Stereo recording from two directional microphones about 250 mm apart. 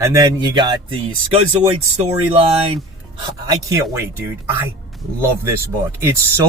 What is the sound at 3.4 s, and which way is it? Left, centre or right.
Speech, centre.